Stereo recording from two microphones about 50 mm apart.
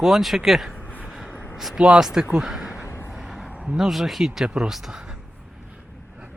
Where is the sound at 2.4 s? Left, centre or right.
Centre.